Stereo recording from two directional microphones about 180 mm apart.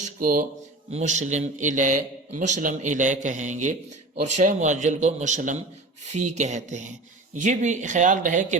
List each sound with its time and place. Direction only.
0.0 s speech: 50° right (ahead or behind)
0.9 s a man's voice: 40° right (ahead or behind)